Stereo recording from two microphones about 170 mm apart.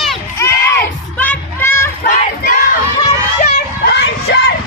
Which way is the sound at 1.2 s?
10° left (ahead or behind).